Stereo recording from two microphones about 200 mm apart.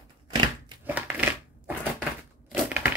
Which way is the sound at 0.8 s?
10° right (ahead or behind).